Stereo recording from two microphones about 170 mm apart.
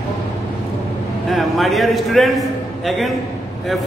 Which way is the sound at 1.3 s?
Centre (ahead or behind).